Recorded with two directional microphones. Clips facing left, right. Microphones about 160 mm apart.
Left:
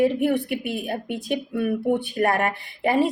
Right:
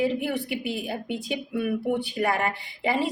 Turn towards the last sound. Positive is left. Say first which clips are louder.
# left 5 dB
turn(degrees=55)  # may be behind; listen again after turning